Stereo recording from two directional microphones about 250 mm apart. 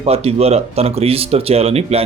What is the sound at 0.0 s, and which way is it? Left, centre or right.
Speech, right.